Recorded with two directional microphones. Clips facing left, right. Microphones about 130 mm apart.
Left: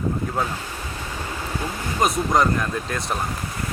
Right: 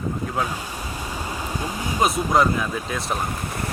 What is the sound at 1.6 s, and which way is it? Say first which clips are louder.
Vehicle: right 1 dB; 15° right (ahead or behind).